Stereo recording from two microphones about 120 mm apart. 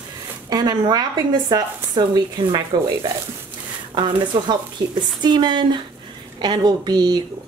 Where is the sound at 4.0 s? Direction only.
40° right (ahead or behind).